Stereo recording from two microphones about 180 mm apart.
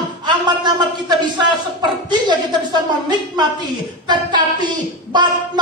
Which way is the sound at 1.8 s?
25° right (ahead or behind).